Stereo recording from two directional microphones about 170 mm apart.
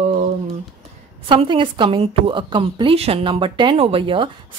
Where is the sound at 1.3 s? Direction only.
30° right (ahead or behind).